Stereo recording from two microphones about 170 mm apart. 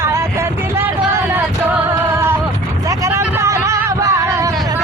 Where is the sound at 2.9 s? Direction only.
15° right (ahead or behind).